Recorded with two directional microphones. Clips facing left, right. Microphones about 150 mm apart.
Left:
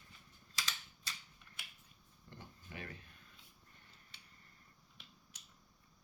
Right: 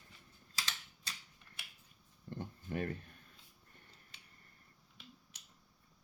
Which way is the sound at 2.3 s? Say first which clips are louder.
Right 11 dB; 50° right (ahead or behind).